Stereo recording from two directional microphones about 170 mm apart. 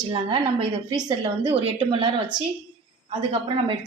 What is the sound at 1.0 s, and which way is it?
A woman's voice, 30° right (ahead or behind).